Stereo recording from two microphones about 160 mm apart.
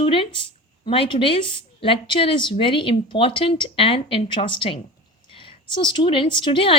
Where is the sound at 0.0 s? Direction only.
35° left (ahead or behind).